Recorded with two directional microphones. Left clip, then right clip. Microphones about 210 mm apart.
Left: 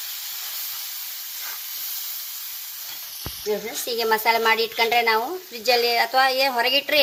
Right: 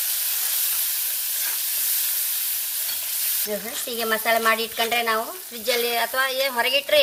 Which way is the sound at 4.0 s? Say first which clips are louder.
Left 2 dB; 25° left (ahead or behind).